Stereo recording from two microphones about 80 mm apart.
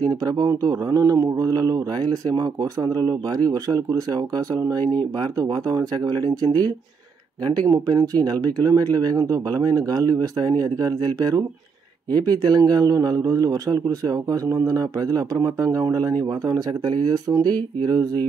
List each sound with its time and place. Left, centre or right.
0.1 s a man's voice: right
7.6 s a man's voice: right